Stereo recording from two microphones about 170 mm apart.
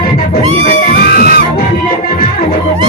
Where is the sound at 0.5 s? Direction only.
50° left (ahead or behind).